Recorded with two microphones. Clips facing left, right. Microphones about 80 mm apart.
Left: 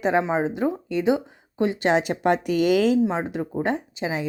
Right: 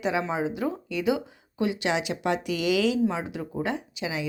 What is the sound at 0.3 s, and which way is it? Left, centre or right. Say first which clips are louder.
Speech: left 5 dB; left.